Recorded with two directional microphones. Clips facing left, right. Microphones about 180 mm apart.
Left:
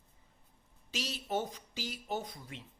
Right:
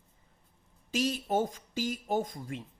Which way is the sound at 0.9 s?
50° right (ahead or behind).